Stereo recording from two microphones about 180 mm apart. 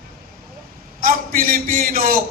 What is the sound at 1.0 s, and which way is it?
A man's voice, 50° right (ahead or behind).